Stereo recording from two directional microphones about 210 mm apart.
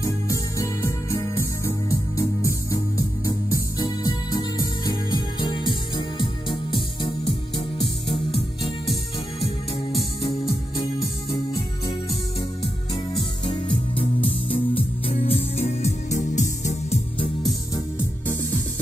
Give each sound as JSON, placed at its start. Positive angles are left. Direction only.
{"t": 0.0, "sound": "music", "side_deg": 15}
{"t": 10.8, "sound": "music", "side_deg": 20}
{"t": 13.5, "sound": "music", "side_deg": 25}
{"t": 17.5, "sound": "music", "side_deg": 10}